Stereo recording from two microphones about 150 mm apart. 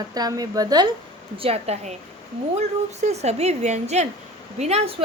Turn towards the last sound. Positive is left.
turn(degrees=-45)  # may be behind; listen again after turning